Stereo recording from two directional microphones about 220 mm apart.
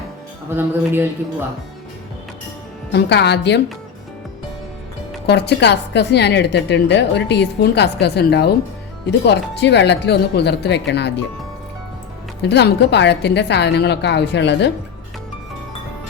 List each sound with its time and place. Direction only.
0.5 s a man's voice: 10° right (ahead or behind)
2.9 s a woman's voice: 50° left (ahead or behind)
5.2 s a woman's voice: 50° left (ahead or behind)
12.4 s a woman's voice: 50° left (ahead or behind)